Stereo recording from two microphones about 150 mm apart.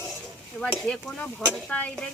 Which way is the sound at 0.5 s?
10° left (ahead or behind).